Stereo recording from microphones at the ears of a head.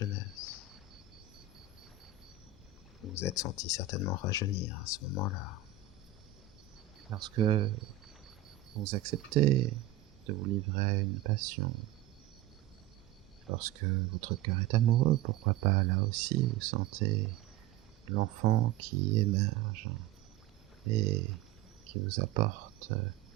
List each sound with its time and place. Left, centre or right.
0.0 s a sound: left
3.0 s speech: left
7.1 s speech: right
13.5 s speech: right